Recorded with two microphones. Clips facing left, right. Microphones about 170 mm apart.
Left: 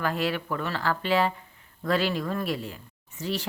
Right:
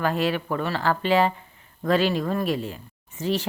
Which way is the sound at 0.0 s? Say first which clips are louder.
Right 4 dB; 20° right (ahead or behind).